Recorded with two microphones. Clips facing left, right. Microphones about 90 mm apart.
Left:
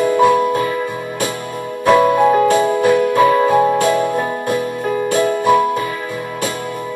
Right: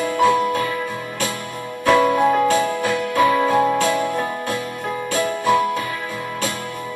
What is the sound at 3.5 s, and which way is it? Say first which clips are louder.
Music: left 4 dB; 15° left (ahead or behind).